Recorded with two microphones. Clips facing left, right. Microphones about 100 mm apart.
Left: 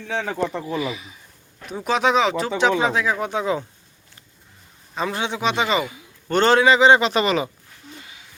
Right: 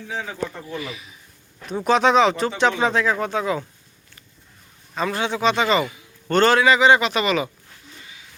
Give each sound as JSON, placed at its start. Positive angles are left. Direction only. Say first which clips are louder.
{"t": 0.1, "sound": "speech", "louder": "left 5 dB", "side_deg": 70}
{"t": 1.6, "sound": "speech", "louder": "right 3 dB", "side_deg": 0}
{"t": 4.9, "sound": "a man's voice", "louder": "right 1 dB", "side_deg": 20}